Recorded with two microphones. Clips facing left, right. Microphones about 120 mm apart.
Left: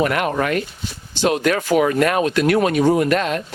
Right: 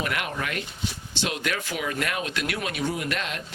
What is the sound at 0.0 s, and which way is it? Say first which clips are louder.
Speech: left 11 dB; 50° left (ahead or behind).